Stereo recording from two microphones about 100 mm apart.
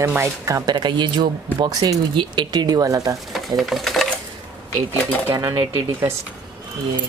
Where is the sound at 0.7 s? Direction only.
50° right (ahead or behind).